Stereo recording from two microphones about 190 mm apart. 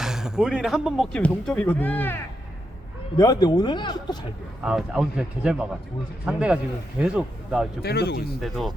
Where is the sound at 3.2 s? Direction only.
20° left (ahead or behind).